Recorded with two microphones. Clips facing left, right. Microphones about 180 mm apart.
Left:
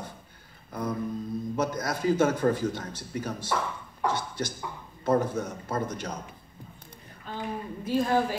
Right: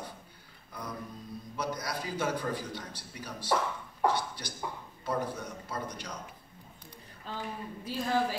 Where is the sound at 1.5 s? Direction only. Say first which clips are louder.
Left 4 dB; 45° left (ahead or behind).